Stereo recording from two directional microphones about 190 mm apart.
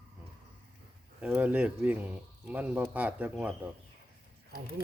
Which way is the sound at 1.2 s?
10° right (ahead or behind).